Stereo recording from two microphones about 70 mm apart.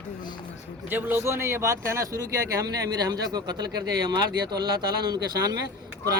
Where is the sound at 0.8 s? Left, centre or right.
Right.